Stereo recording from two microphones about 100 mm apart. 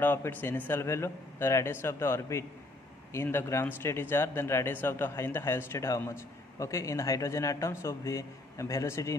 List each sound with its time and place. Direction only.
0.0 s a man's voice: 20° left (ahead or behind)